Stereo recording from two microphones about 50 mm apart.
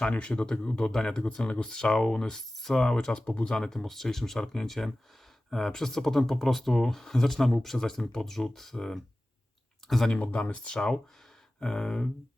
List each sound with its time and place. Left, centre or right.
0.0 s speech: left; by 10.1 s centre
10.2 s speech: left